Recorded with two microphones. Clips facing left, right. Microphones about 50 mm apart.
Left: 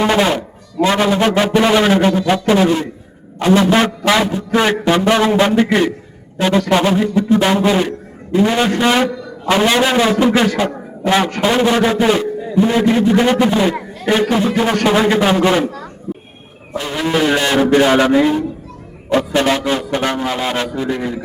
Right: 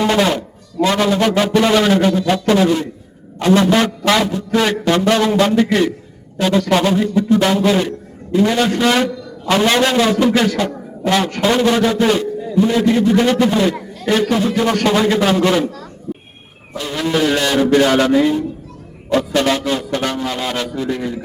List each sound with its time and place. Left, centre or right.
0.0 s a man's voice: centre